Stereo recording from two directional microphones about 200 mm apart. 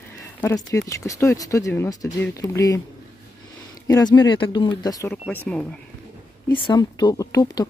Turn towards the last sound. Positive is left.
turn(degrees=20)  # may be behind; listen again after turning